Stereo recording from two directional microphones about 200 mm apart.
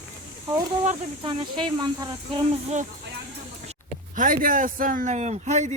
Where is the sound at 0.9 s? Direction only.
25° right (ahead or behind).